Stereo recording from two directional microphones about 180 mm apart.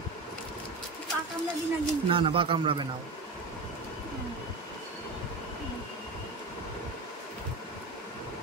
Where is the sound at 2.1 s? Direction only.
30° right (ahead or behind).